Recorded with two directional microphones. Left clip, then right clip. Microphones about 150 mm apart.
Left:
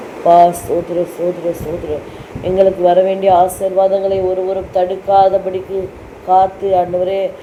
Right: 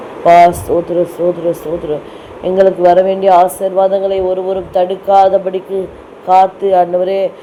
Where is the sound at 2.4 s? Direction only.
30° right (ahead or behind).